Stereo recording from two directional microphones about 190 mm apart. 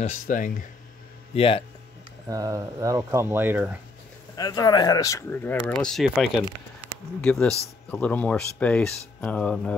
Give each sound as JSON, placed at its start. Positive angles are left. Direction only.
{"t": 0.0, "sound": "speech", "side_deg": 40}
{"t": 1.3, "sound": "speech", "side_deg": 30}
{"t": 2.2, "sound": "speech", "side_deg": -20}
{"t": 4.4, "sound": "speech", "side_deg": 20}
{"t": 6.8, "sound": "a sound", "side_deg": -10}
{"t": 7.2, "sound": "speech", "side_deg": 5}